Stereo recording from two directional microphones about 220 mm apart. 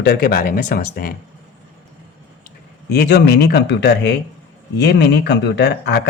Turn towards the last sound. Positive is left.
turn(degrees=50)  # may be behind; listen again after turning